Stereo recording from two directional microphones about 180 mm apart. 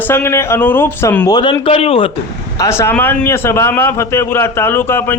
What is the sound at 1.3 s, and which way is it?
Speech, 20° left (ahead or behind).